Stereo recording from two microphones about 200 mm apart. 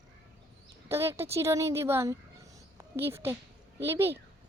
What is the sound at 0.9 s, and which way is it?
Speech, 10° right (ahead or behind).